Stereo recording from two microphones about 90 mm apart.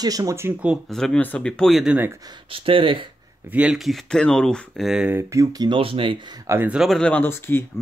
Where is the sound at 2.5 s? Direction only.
80° right.